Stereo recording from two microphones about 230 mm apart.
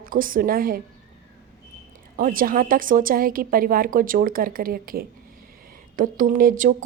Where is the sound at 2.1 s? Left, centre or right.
Right.